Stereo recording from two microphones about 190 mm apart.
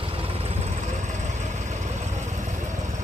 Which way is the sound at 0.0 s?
30° right (ahead or behind).